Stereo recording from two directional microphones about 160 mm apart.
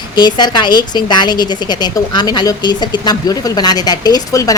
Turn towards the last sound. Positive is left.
turn(degrees=20)  # may be behind; listen again after turning